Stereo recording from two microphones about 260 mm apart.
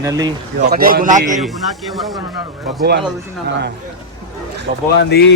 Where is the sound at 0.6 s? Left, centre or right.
Right.